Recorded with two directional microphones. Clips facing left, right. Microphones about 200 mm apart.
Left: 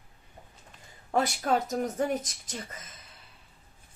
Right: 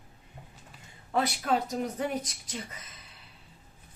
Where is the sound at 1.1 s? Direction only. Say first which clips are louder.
Left 1 dB; 45° left (ahead or behind).